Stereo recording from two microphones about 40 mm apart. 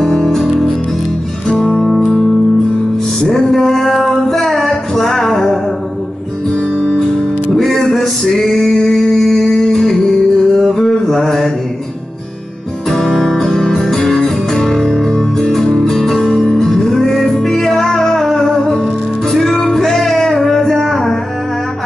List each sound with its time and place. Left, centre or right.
0.0 s music: centre
3.2 s a sound: centre
6.8 s music: centre
7.5 s music: centre
8.7 s a sound: centre
9.6 s music: centre
12.9 s music: centre